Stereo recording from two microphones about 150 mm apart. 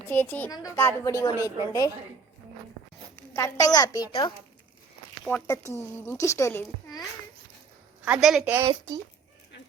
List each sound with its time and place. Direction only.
0.1 s a child's voice: 10° left (ahead or behind)
3.3 s a woman's voice: 20° left (ahead or behind)
5.2 s a child's voice: 15° left (ahead or behind)
8.0 s a woman's voice: 5° right (ahead or behind)